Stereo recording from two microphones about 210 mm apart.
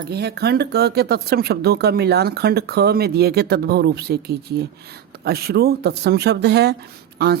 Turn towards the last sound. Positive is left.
turn(degrees=-50)  # may be behind; listen again after turning